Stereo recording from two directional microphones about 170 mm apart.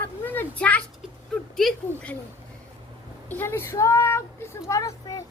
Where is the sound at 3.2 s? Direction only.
15° left (ahead or behind).